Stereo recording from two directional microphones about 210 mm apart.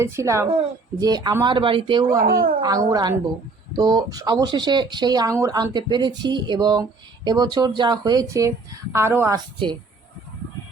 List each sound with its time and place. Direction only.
0.0 s speech: 15° right (ahead or behind)
2.2 s speech: 45° right (ahead or behind)
2.6 s speech: 20° right (ahead or behind)